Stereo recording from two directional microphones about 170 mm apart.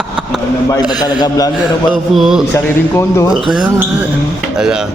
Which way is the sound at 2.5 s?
15° left (ahead or behind).